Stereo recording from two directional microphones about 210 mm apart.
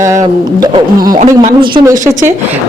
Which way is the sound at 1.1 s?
35° right (ahead or behind).